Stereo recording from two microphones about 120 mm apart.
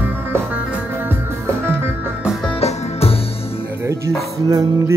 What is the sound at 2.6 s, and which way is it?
Music, 60° left (ahead or behind).